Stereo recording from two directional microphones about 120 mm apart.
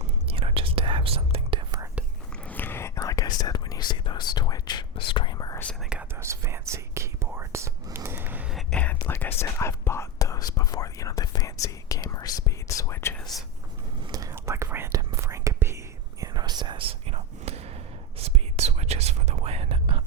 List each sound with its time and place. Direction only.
0.0 s whispering: 55° right (ahead or behind)
2.3 s whispering: 15° left (ahead or behind); by 5.5 s 35° left (ahead or behind)
5.8 s whispering: 5° right (ahead or behind)
6.1 s whispering: 25° right (ahead or behind)
8.7 s whispering: 10° left (ahead or behind)
14.1 s whispering: 30° right (ahead or behind)
16.2 s whispering: 35° right (ahead or behind); by 20.0 s 55° right (ahead or behind)